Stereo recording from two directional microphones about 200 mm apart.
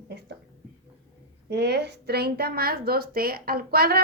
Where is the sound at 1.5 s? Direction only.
55° right (ahead or behind).